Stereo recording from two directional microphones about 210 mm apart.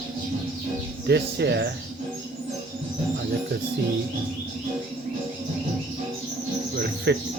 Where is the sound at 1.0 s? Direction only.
50° right (ahead or behind).